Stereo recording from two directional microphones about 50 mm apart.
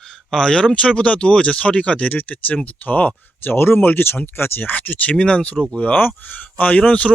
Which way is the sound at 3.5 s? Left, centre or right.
Left.